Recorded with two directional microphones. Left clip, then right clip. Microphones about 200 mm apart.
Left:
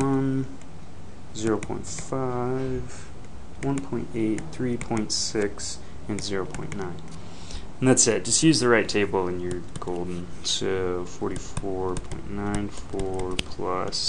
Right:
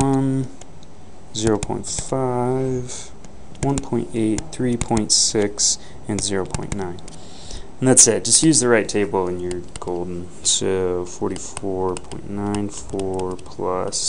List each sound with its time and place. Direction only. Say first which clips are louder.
0.0 s a sound: right 5 dB; 30° right (ahead or behind)
1.3 s speech: right 6 dB; 30° right (ahead or behind); by 10.0 s 10° right (ahead or behind)
10.4 s speech: right 6 dB; 20° right (ahead or behind)